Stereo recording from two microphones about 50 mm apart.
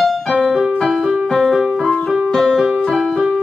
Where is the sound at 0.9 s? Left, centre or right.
Centre.